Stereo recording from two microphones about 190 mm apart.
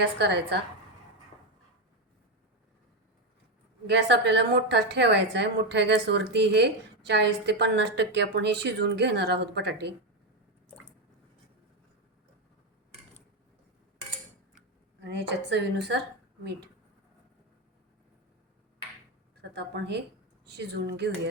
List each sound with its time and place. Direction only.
0.0 s a woman's voice: 60° right (ahead or behind)
3.8 s a woman's voice: 65° right (ahead or behind)
15.0 s a woman's voice: 65° right (ahead or behind)
19.5 s a woman's voice: 60° right (ahead or behind)